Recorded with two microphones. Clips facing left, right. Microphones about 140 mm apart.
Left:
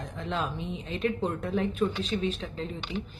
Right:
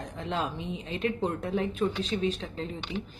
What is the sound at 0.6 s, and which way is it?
Speech, 35° left (ahead or behind).